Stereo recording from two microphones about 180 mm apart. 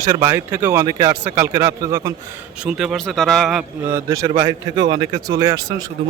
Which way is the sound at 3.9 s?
20° right (ahead or behind).